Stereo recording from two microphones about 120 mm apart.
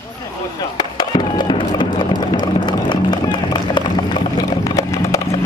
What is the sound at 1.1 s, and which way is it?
Music, 40° left (ahead or behind).